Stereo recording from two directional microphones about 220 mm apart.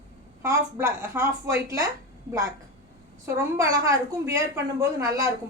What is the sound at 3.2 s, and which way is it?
A woman's voice, 15° right (ahead or behind).